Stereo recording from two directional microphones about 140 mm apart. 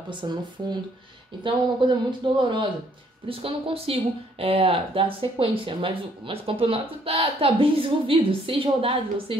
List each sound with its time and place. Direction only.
0.1 s speech: 35° right (ahead or behind)